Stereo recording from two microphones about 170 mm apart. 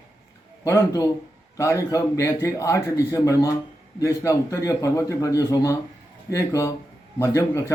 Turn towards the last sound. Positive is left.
turn(degrees=15)  # may be behind; listen again after turning